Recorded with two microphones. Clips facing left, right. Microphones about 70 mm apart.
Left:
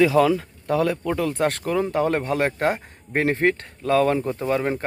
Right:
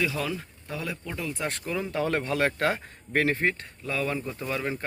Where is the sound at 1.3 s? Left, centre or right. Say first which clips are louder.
Left 9 dB; left.